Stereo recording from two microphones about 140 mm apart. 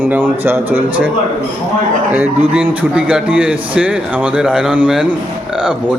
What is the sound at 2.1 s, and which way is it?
A man's voice, 10° right (ahead or behind).